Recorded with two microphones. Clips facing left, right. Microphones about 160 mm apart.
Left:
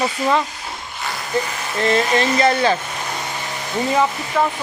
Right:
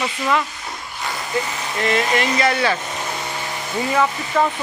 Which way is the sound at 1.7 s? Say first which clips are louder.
Left 2 dB; 30° left (ahead or behind).